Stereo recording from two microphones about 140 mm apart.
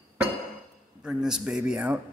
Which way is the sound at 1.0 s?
5° right (ahead or behind).